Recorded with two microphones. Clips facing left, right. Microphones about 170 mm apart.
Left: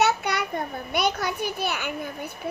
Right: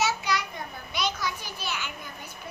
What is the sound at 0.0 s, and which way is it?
A child's voice, 60° left (ahead or behind).